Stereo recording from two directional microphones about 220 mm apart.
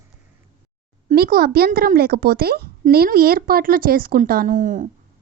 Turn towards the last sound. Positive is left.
turn(degrees=-35)  # may be behind; listen again after turning